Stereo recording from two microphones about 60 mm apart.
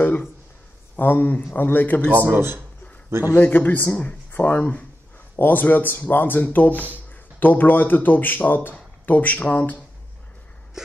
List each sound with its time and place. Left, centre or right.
0.0 s a sound: left
0.9 s speech: left
2.1 s speech: right
3.3 s speech: left